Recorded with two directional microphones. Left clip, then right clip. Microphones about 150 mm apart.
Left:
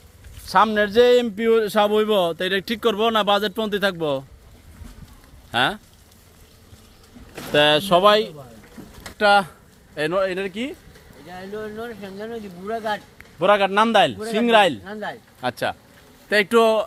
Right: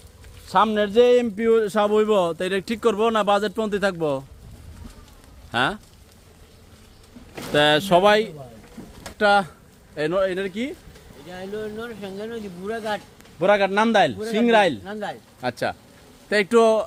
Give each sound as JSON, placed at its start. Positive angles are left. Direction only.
{"t": 0.4, "sound": "speech", "side_deg": 0}
{"t": 5.5, "sound": "speech", "side_deg": 0}
{"t": 7.5, "sound": "speech", "side_deg": -15}
{"t": 9.1, "sound": "speech", "side_deg": 0}
{"t": 15.4, "sound": "speech", "side_deg": 0}